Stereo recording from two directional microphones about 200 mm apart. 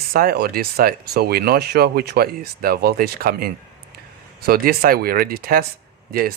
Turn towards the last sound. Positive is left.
turn(degrees=-50)  # may be behind; listen again after turning